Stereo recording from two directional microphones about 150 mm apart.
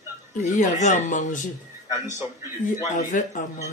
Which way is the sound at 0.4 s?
50° left (ahead or behind).